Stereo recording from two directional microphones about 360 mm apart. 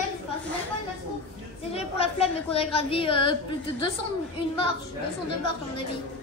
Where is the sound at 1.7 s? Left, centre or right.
Centre.